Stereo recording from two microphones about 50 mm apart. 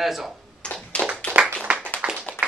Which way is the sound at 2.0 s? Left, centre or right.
Right.